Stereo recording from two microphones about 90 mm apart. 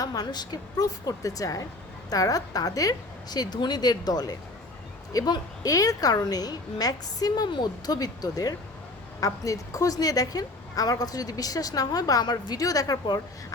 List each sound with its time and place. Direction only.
0.0 s a woman's voice: 45° left (ahead or behind)